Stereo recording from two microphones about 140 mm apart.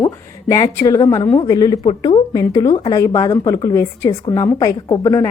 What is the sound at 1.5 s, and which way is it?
A woman's voice, 25° left (ahead or behind).